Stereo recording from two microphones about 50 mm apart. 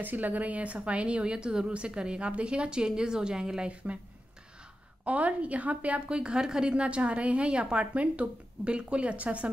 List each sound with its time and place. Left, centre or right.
0.0 s a woman's voice: right; by 3.7 s centre
5.0 s a woman's voice: right